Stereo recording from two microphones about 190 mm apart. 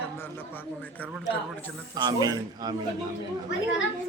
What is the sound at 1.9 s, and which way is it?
Speech, 20° right (ahead or behind).